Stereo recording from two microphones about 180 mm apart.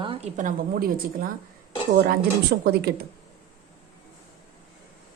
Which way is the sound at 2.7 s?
60° right (ahead or behind).